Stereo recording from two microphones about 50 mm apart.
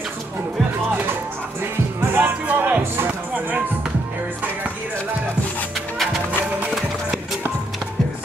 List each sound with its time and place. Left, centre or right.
2.0 s music: right
2.4 s music: right